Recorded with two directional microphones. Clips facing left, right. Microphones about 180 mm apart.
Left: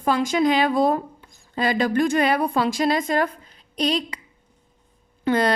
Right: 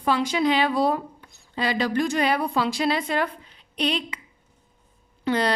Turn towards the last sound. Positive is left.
turn(degrees=50)  # may be behind; listen again after turning